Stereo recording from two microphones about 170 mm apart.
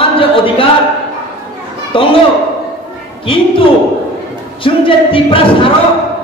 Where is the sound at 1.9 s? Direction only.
30° left (ahead or behind).